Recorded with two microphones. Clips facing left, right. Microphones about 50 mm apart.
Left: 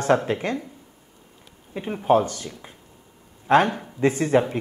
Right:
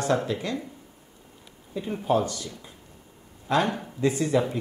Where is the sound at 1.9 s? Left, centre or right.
Left.